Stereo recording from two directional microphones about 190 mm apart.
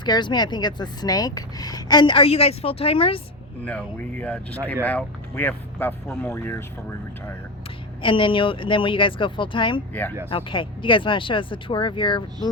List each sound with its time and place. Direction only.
0.0 s speech: 25° left (ahead or behind)
3.6 s speech: 5° left (ahead or behind)
8.0 s speech: 25° left (ahead or behind)